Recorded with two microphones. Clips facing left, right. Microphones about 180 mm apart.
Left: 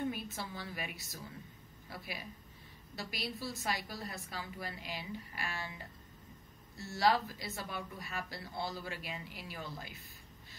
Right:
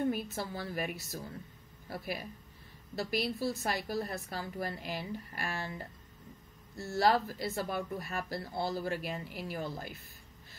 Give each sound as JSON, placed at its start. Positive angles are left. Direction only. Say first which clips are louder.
{"t": 0.1, "sound": "speech", "louder": "right 6 dB", "side_deg": -45}